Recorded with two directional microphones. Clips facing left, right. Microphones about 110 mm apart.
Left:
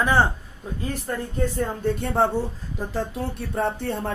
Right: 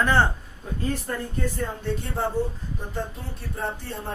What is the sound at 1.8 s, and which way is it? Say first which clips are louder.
Speech: left 7 dB; 60° left (ahead or behind).